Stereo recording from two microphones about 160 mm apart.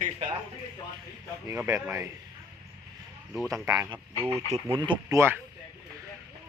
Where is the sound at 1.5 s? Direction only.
15° right (ahead or behind).